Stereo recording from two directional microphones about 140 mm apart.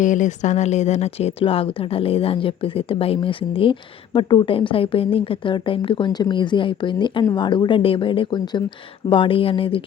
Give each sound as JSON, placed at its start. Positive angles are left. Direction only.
{"t": 0.0, "sound": "speech", "side_deg": 60}